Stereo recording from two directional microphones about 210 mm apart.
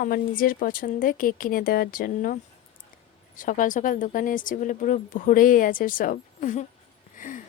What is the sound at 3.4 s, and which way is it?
Speech, 40° left (ahead or behind).